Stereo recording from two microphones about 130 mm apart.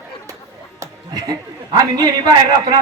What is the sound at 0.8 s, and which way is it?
A man's voice, 25° right (ahead or behind).